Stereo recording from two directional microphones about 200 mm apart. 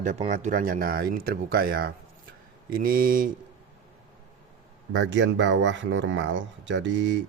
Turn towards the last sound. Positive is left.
turn(degrees=-60)  # may be behind; listen again after turning